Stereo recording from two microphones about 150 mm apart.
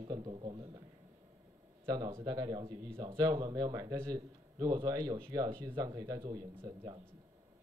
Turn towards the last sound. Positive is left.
turn(degrees=-25)  # may be behind; listen again after turning